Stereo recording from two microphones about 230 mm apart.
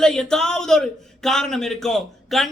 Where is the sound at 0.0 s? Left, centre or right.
Centre.